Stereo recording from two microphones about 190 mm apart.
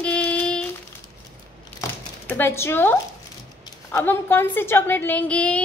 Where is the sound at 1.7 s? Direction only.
10° left (ahead or behind).